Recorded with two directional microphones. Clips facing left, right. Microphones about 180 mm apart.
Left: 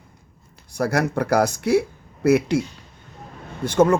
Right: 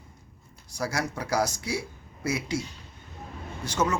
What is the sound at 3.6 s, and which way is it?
Speech, 55° left (ahead or behind).